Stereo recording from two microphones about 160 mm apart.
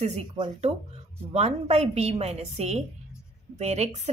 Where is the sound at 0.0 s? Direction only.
45° right (ahead or behind).